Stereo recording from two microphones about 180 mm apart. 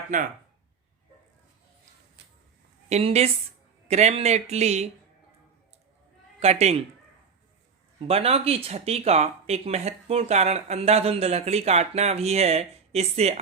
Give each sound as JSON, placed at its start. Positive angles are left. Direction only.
{"t": 0.1, "sound": "speech", "side_deg": -45}
{"t": 2.9, "sound": "speech", "side_deg": -35}
{"t": 6.4, "sound": "speech", "side_deg": -35}
{"t": 7.9, "sound": "speech", "side_deg": -35}